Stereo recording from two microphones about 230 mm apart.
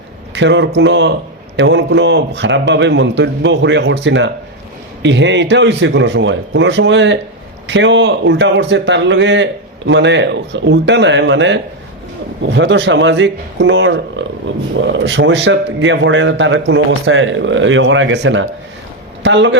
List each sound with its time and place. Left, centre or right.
0.3 s a man's voice: right